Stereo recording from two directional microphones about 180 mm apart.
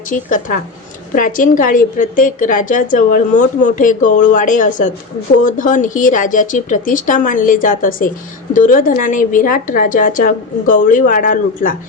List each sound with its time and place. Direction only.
0.1 s a woman's voice: 45° left (ahead or behind)